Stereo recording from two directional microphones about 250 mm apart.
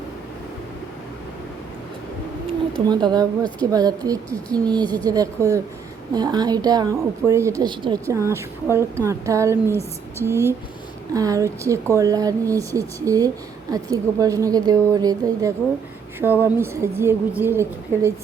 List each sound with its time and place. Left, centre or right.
2.7 s speech: centre